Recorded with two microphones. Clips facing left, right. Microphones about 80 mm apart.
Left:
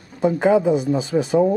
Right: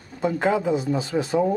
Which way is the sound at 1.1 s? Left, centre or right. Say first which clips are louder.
Left 5 dB; right.